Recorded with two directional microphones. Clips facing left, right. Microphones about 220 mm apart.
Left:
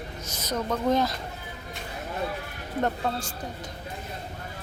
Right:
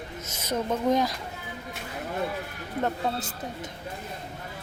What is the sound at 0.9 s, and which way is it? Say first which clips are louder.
Speech: left 1 dB; 15° right (ahead or behind).